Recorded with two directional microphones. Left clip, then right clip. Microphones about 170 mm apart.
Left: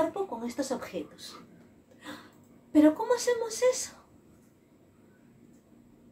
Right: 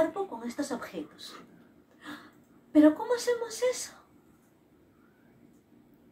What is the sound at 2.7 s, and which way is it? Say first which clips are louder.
Speech: even; 20° left (ahead or behind).